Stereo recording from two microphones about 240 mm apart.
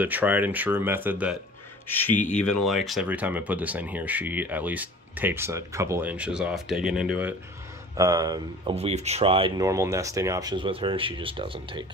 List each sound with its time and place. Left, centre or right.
0.0 s speech: centre
1.9 s speech: centre; by 11.8 s right